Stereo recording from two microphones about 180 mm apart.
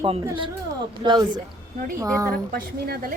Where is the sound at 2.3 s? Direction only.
60° right (ahead or behind).